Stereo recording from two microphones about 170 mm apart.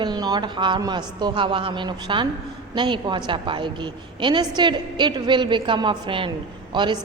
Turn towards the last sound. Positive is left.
turn(degrees=-25)  # may be behind; listen again after turning